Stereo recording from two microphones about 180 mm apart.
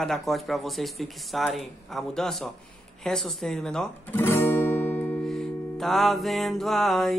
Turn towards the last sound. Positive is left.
turn(degrees=0)  # may be behind; listen again after turning